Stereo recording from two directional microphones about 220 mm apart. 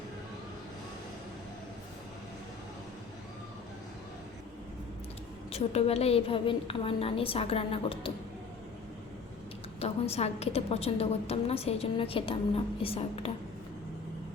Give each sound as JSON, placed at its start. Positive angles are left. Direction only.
{"t": 5.5, "sound": "a woman's voice", "side_deg": 25}
{"t": 9.8, "sound": "a woman's voice", "side_deg": 30}